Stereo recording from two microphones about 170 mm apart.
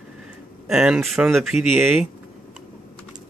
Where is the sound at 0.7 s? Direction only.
5° right (ahead or behind).